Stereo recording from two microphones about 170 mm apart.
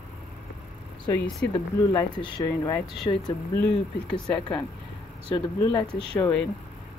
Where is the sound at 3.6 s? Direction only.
5° left (ahead or behind).